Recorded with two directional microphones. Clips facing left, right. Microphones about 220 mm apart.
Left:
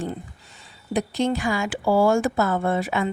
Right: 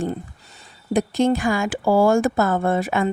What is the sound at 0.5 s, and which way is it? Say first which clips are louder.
Speech: right 4 dB; 50° right (ahead or behind).